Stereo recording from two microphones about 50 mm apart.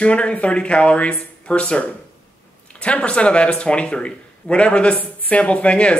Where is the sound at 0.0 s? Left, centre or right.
Left.